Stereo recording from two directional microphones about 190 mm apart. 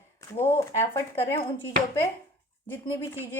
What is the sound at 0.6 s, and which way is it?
Speech, 15° left (ahead or behind).